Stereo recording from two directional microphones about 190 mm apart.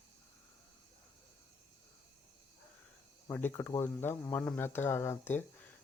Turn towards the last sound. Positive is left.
turn(degrees=10)  # may be behind; listen again after turning